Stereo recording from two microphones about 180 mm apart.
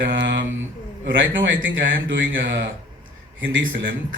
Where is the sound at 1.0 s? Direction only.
90° right.